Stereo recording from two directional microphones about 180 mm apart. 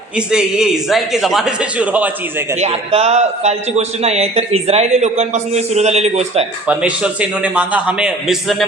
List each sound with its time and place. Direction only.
0.2 s a man's voice: 5° right (ahead or behind)
2.6 s a man's voice: 35° right (ahead or behind)
6.7 s a man's voice: 5° right (ahead or behind)